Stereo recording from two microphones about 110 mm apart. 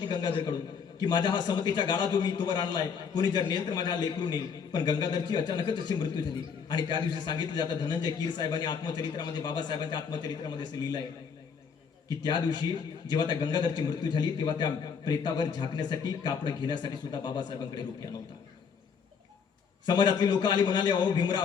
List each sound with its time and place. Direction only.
0.0 s a man's voice: 40° left (ahead or behind)
12.0 s a man's voice: 45° left (ahead or behind)
19.8 s a man's voice: 45° left (ahead or behind)